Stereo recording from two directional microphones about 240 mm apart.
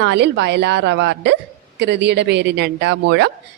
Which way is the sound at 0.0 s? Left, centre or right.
Right.